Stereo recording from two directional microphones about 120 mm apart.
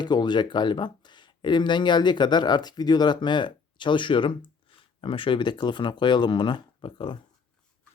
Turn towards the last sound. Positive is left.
turn(degrees=45)  # may be behind; listen again after turning